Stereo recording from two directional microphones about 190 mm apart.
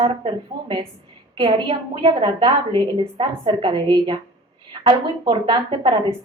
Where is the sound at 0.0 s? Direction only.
25° right (ahead or behind).